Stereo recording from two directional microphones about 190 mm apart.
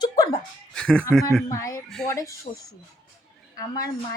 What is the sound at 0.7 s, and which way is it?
Speech, 5° left (ahead or behind).